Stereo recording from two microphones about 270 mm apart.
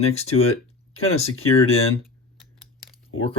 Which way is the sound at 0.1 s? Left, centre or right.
Left.